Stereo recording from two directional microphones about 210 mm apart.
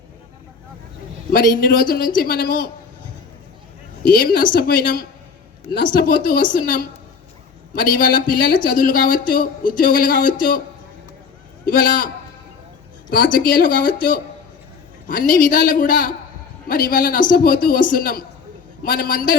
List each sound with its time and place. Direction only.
1.3 s a man's voice: 45° left (ahead or behind)
4.2 s a man's voice: 45° left (ahead or behind)
11.6 s a man's voice: 45° left (ahead or behind)
13.1 s a man's voice: 40° left (ahead or behind)